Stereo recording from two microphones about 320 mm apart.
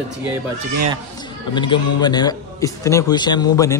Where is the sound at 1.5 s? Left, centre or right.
Centre.